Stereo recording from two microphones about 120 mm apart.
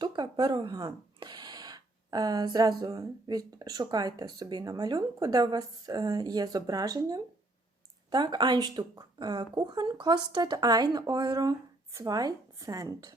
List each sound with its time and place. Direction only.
0.0 s speech: 35° right (ahead or behind)